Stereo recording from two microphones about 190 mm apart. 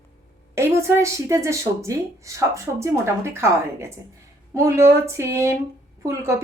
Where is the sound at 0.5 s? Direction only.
15° right (ahead or behind).